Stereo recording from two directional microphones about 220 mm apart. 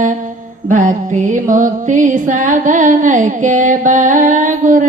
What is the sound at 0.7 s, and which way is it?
Music, 35° right (ahead or behind).